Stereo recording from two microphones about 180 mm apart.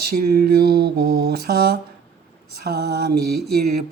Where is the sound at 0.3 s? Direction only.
60° right (ahead or behind).